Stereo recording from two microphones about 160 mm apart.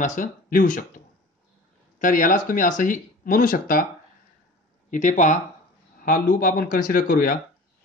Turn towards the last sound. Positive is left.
turn(degrees=65)  # may be behind; listen again after turning